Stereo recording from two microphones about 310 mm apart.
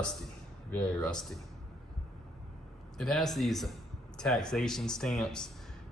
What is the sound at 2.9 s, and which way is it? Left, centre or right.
Speech, centre.